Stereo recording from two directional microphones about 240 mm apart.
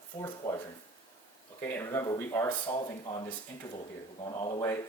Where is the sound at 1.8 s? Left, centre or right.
Centre.